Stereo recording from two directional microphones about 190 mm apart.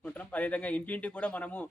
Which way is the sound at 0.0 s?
10° left (ahead or behind).